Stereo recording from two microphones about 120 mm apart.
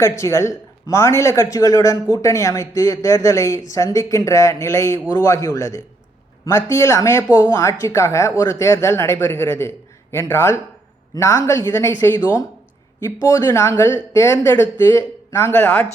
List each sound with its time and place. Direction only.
0.0 s a man's voice: 25° left (ahead or behind)